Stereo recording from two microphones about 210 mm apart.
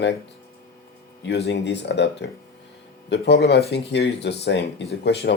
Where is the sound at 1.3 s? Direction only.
55° left (ahead or behind).